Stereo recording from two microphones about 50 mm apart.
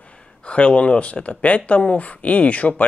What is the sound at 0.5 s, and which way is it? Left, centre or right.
Speech, left.